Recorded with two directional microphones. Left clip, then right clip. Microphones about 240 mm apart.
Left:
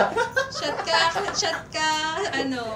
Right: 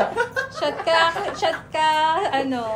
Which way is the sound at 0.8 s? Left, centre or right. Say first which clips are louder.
Right 3 dB; centre.